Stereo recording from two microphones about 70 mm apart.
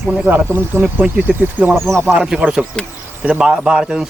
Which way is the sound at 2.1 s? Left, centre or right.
Centre.